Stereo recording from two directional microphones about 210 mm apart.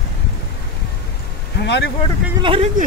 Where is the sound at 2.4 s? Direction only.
25° right (ahead or behind).